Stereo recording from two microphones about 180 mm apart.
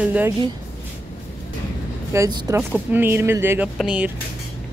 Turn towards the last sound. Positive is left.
turn(degrees=-5)  # may be behind; listen again after turning